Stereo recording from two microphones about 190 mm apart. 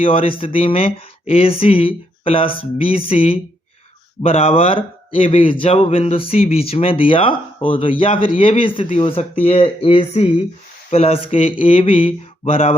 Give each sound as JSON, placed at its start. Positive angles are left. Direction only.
{"t": 0.0, "sound": "speech", "side_deg": 30}